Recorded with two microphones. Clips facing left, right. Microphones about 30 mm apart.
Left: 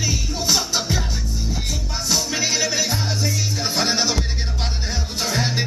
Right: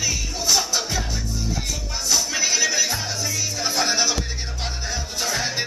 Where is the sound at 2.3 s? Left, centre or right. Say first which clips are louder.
Even; left.